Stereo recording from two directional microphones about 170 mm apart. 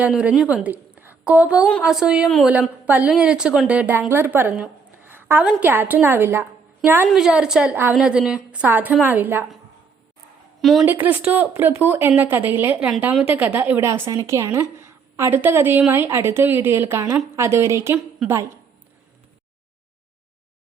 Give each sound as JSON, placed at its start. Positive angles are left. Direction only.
{"t": 0.0, "sound": "a woman's voice", "side_deg": -5}
{"t": 10.6, "sound": "a woman's voice", "side_deg": 0}
{"t": 11.0, "sound": "a woman's voice", "side_deg": -10}